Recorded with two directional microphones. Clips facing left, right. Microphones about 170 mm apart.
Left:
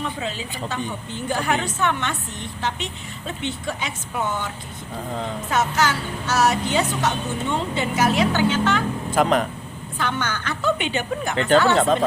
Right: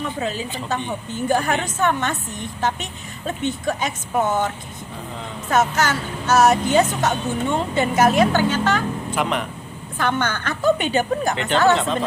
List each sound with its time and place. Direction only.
0.0 s a woman's voice: 45° right (ahead or behind)
9.1 s speech: 40° left (ahead or behind)
10.0 s a woman's voice: 50° right (ahead or behind)
11.3 s speech: 40° left (ahead or behind)